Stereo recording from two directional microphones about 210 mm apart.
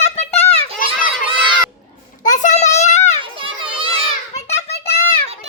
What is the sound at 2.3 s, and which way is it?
Child singing, 35° left (ahead or behind).